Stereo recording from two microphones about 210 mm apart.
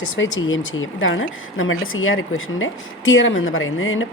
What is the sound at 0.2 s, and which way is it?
Speech, 65° left (ahead or behind).